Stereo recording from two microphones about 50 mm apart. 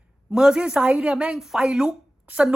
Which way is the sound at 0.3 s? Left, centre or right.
Centre.